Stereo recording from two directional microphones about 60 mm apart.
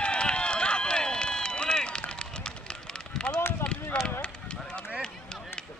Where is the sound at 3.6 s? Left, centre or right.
Centre.